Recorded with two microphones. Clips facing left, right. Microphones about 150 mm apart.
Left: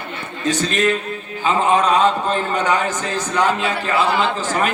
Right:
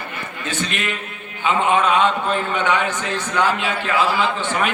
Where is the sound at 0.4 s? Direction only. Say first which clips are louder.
Left 8 dB; 40° left (ahead or behind).